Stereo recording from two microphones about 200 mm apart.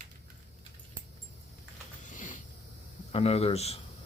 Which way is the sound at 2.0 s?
40° left (ahead or behind).